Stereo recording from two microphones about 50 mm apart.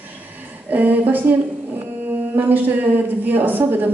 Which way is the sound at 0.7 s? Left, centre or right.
Right.